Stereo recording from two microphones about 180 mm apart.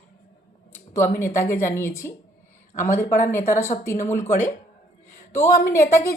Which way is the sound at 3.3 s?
15° left (ahead or behind).